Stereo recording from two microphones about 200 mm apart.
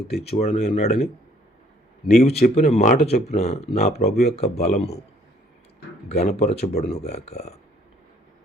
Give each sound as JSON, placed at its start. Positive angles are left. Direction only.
{"t": 0.3, "sound": "speech", "side_deg": 35}
{"t": 2.1, "sound": "speech", "side_deg": 30}
{"t": 6.1, "sound": "speech", "side_deg": 35}